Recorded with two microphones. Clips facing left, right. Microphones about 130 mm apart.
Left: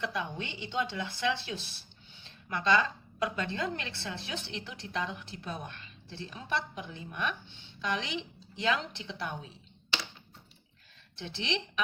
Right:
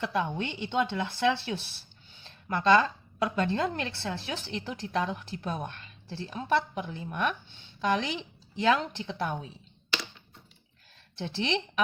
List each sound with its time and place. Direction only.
0.0 s a woman's voice: 50° right (ahead or behind)
11.2 s a woman's voice: 45° right (ahead or behind)